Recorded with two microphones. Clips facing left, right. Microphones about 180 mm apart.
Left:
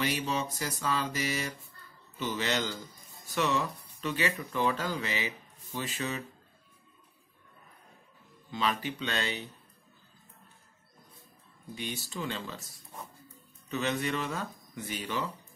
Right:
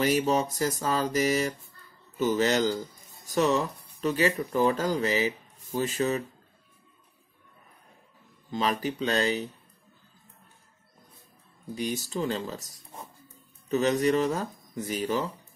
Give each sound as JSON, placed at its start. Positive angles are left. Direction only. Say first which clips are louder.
{"t": 0.0, "sound": "mantra", "louder": "right 7 dB", "side_deg": -45}
{"t": 2.1, "sound": "speech", "louder": "right 8 dB", "side_deg": -40}
{"t": 8.5, "sound": "speech", "louder": "right 4 dB", "side_deg": -40}
{"t": 11.7, "sound": "speech", "louder": "right 7 dB", "side_deg": -40}
{"t": 13.7, "sound": "speech", "louder": "right 8 dB", "side_deg": -40}